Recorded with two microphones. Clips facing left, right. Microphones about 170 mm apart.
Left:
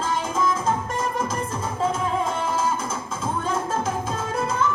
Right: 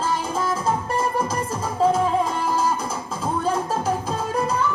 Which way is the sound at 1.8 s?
35° right (ahead or behind).